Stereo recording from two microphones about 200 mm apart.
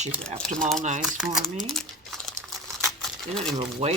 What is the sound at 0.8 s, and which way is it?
Speech, 35° right (ahead or behind).